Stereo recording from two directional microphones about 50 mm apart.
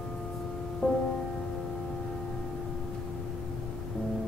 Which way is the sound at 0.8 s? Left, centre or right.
Centre.